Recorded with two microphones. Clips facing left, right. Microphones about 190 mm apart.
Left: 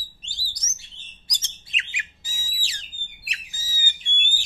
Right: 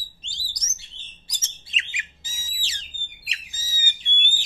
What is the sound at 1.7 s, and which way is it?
Bird, 20° right (ahead or behind).